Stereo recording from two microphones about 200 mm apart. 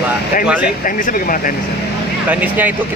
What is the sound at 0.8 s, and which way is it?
Speech, 45° left (ahead or behind).